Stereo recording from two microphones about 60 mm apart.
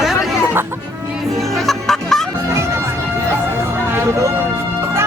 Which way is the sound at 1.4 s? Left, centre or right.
Centre.